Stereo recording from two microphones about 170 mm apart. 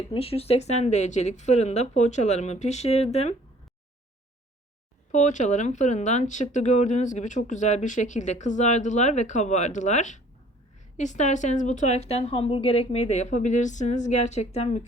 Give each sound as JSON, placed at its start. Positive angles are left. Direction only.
{"t": 0.1, "sound": "speech", "side_deg": 35}
{"t": 5.1, "sound": "speech", "side_deg": 45}